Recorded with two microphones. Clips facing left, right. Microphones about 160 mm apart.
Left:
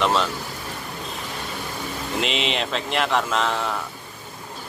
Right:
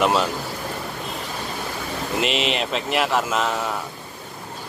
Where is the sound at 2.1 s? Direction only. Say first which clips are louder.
Right 2 dB; centre (ahead or behind).